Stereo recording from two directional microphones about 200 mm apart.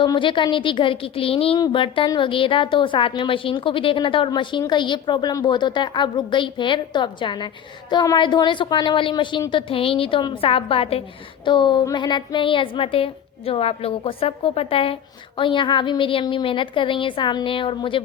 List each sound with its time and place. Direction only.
0.0 s a woman's voice: 25° left (ahead or behind)